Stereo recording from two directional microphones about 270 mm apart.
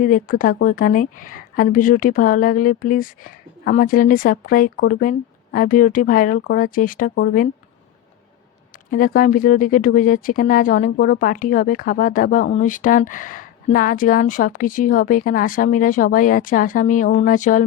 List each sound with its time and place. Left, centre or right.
0.0 s speech: left
8.9 s speech: left